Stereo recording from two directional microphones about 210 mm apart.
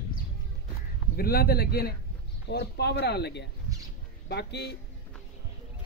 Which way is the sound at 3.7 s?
15° right (ahead or behind).